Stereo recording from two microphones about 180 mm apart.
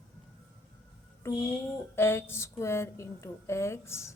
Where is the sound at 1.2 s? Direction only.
15° left (ahead or behind).